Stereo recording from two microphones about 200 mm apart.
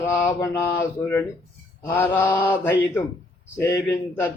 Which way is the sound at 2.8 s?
20° left (ahead or behind).